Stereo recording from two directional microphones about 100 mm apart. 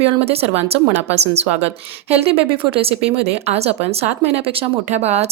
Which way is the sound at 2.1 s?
70° right (ahead or behind).